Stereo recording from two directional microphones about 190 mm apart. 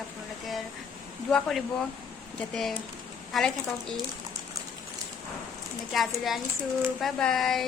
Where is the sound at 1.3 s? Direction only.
Centre (ahead or behind).